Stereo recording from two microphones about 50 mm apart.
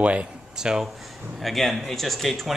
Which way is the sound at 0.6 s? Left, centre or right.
Centre.